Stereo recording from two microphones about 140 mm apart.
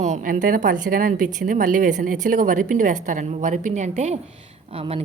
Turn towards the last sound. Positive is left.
turn(degrees=-40)  # may be behind; listen again after turning